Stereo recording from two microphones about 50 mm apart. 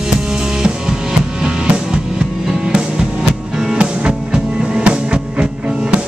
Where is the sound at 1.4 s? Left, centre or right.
Centre.